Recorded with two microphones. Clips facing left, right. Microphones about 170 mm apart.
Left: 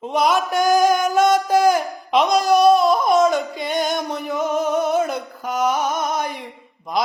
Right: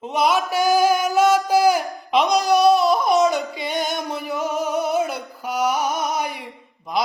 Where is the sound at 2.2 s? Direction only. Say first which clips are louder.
Left 2 dB; 50° left (ahead or behind).